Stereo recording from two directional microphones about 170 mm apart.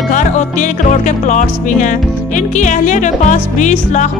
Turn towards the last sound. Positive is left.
turn(degrees=45)  # may be behind; listen again after turning